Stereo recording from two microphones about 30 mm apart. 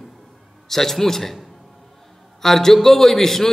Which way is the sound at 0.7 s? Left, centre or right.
Centre.